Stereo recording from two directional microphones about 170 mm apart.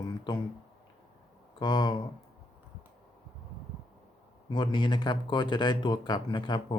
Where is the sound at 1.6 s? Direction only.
25° left (ahead or behind).